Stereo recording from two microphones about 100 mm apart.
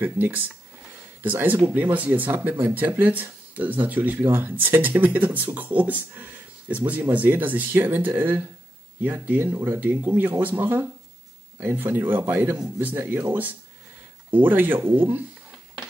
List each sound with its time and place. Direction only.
0.0 s a man's voice: 20° right (ahead or behind)